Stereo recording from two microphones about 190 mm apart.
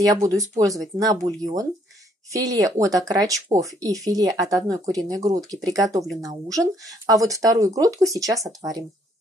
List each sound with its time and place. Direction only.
0.0 s speech: 20° right (ahead or behind)